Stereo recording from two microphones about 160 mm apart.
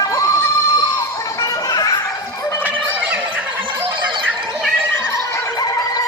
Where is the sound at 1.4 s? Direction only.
20° left (ahead or behind).